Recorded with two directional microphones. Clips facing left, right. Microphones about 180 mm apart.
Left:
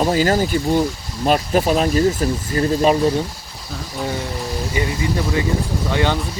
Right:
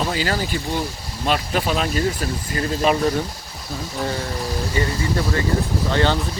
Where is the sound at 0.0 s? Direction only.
40° left (ahead or behind).